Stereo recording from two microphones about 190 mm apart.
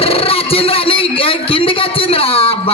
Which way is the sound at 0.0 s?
30° left (ahead or behind).